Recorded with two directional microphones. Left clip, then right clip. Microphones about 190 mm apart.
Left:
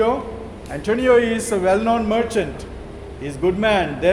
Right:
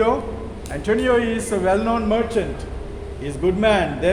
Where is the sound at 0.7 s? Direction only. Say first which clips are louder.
Left 3 dB; 15° left (ahead or behind); by 2.5 s 40° left (ahead or behind).